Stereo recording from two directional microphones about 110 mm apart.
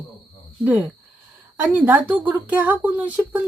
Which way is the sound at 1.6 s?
15° right (ahead or behind).